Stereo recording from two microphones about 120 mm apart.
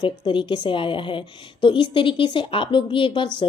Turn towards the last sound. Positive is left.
turn(degrees=45)  # may be behind; listen again after turning